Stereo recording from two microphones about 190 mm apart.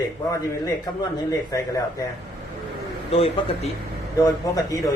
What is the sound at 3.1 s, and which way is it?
Speech, 30° left (ahead or behind).